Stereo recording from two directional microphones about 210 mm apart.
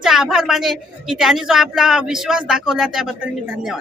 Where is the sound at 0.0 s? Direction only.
Centre (ahead or behind).